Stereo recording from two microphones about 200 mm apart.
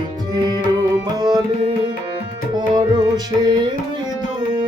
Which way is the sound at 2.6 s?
20° right (ahead or behind).